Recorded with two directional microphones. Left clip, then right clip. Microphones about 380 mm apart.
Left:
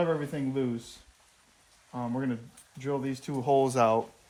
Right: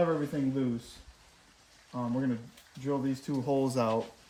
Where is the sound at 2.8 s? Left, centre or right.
Centre.